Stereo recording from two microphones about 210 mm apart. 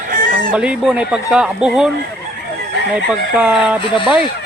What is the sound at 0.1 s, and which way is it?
Chicken, 40° right (ahead or behind).